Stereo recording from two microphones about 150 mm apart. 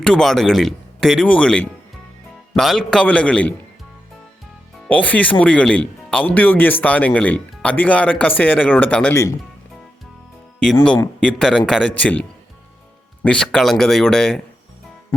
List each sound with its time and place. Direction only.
0.0 s speech: 5° left (ahead or behind)
4.9 s speech: 10° left (ahead or behind)
11.2 s speech: 5° left (ahead or behind)
13.2 s speech: 5° left (ahead or behind)